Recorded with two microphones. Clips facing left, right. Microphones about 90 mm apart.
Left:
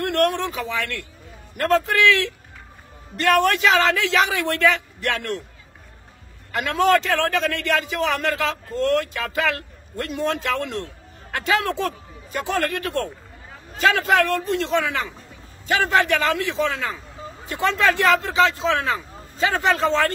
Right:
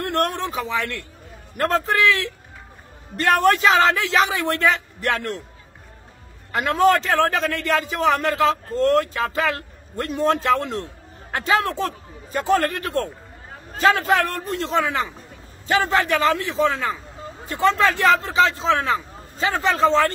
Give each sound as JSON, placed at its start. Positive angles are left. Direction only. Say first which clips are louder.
{"t": 0.0, "sound": "a man's voice", "louder": "left 2 dB", "side_deg": -35}
{"t": 6.5, "sound": "a man's voice", "louder": "right 1 dB", "side_deg": -35}